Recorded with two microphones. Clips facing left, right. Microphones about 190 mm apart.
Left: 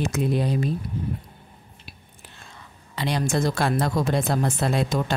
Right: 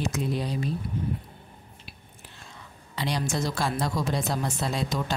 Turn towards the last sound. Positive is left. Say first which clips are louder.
# left 5 dB
turn(degrees=55)  # may be behind; listen again after turning